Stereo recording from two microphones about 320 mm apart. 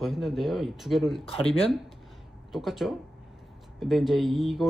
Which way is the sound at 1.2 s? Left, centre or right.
Centre.